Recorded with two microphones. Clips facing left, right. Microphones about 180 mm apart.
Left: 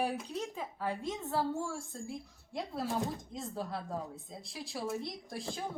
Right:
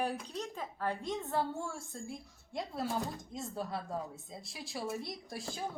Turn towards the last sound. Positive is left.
turn(degrees=0)  # may be behind; listen again after turning